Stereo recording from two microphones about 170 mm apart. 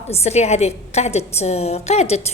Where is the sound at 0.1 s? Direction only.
40° left (ahead or behind).